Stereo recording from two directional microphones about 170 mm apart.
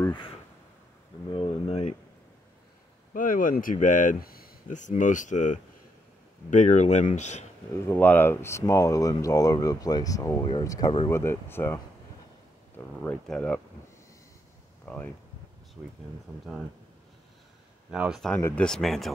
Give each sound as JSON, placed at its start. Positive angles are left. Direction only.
{"t": 1.3, "sound": "speech", "side_deg": 35}
{"t": 3.1, "sound": "speech", "side_deg": 55}
{"t": 7.7, "sound": "speech", "side_deg": 15}
{"t": 14.9, "sound": "speech", "side_deg": 10}
{"t": 17.9, "sound": "speech", "side_deg": -5}
{"t": 18.3, "sound": "speech", "side_deg": 5}